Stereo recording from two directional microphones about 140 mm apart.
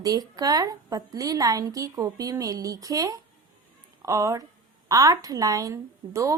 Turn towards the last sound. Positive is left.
turn(degrees=-20)  # may be behind; listen again after turning